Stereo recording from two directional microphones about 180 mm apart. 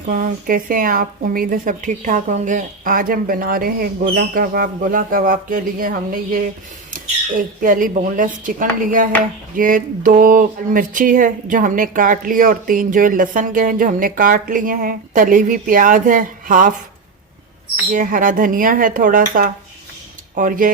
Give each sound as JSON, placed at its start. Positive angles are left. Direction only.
{"t": 0.1, "sound": "speech", "side_deg": -50}
{"t": 17.9, "sound": "speech", "side_deg": -50}